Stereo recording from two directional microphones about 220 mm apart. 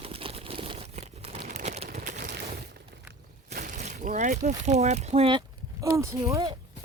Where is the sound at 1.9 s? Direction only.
40° right (ahead or behind).